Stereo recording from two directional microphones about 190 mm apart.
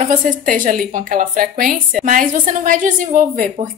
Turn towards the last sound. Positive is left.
turn(degrees=-45)  # may be behind; listen again after turning